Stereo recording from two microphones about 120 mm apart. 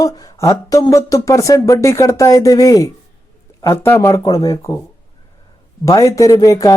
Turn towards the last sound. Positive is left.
turn(degrees=30)  # may be behind; listen again after turning